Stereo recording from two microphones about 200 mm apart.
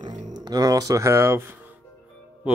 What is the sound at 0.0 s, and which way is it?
Speech, 20° right (ahead or behind).